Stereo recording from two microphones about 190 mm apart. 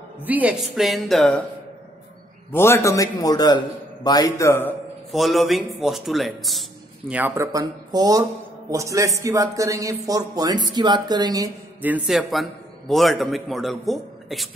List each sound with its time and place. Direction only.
0.2 s a man's voice: 10° right (ahead or behind)
2.5 s a man's voice: 15° left (ahead or behind)
5.1 s a man's voice: centre (ahead or behind)